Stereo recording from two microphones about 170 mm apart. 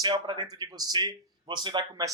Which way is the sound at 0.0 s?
25° right (ahead or behind).